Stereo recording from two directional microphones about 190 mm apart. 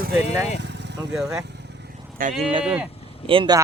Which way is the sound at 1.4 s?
60° right (ahead or behind).